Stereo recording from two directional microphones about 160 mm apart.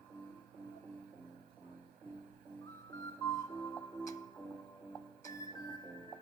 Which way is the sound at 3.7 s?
20° left (ahead or behind).